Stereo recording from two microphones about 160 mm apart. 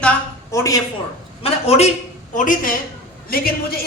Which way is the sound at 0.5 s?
20° left (ahead or behind).